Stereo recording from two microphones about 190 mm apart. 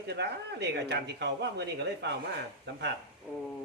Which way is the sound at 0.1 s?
60° right (ahead or behind).